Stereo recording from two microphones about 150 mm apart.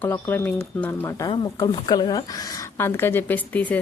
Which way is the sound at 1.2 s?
30° left (ahead or behind).